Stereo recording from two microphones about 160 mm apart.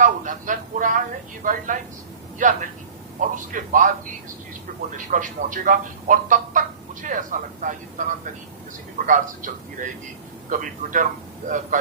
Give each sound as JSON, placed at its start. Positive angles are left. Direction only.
{"t": 0.0, "sound": "a sound", "side_deg": -55}
{"t": 1.5, "sound": "a man's voice", "side_deg": -55}
{"t": 9.0, "sound": "a man's voice", "side_deg": -55}